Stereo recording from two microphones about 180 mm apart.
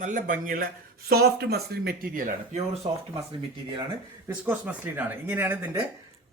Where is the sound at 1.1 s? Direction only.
65° right (ahead or behind); by 2.9 s 35° right (ahead or behind).